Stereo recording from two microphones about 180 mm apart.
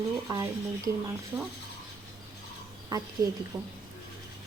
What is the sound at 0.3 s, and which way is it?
Speech, 20° right (ahead or behind).